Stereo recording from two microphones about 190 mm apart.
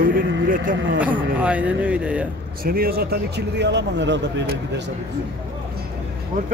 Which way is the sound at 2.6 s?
50° right (ahead or behind).